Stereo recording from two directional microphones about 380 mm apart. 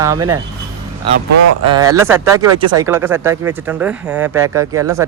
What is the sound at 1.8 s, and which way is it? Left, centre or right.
A man's voice, centre.